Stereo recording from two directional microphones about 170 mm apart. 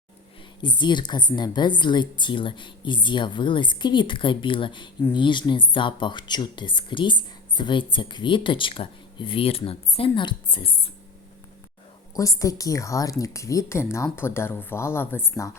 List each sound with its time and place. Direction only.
0.6 s speech: 25° left (ahead or behind)
12.1 s a woman's voice: 20° left (ahead or behind)